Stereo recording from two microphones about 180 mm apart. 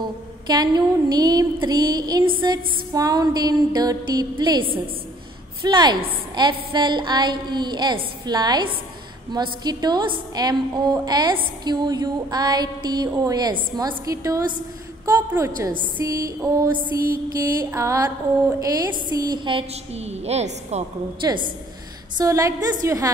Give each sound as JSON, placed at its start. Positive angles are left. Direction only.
{"t": 0.0, "sound": "a woman's voice", "side_deg": -20}
{"t": 15.0, "sound": "music", "side_deg": -15}
{"t": 18.6, "sound": "a woman's voice", "side_deg": -20}
{"t": 21.2, "sound": "a woman's voice", "side_deg": -20}